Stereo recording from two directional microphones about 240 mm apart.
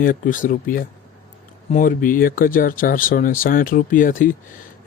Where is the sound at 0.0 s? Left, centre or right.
Left.